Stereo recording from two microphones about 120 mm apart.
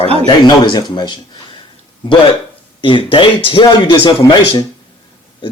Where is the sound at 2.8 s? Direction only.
45° left (ahead or behind).